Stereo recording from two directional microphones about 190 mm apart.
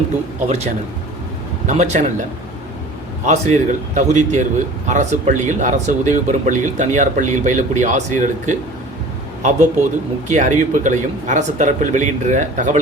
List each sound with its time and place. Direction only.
0.4 s speech: 35° right (ahead or behind)
3.2 s a man's voice: 40° right (ahead or behind)